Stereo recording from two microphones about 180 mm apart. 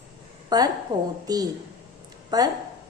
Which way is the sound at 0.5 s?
20° right (ahead or behind).